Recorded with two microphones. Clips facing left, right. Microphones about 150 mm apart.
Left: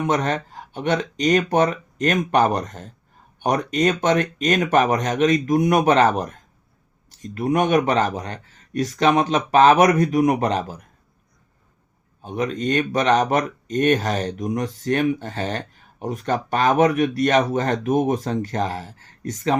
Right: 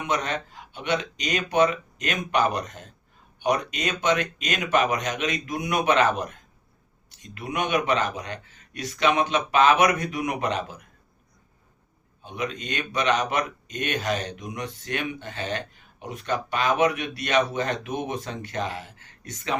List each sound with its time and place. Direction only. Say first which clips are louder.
0.0 s speech: left 6 dB; 45° left (ahead or behind)
12.2 s speech: left 8 dB; 45° left (ahead or behind)